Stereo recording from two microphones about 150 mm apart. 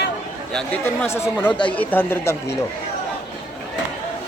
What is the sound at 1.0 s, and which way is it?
Speech, 15° left (ahead or behind).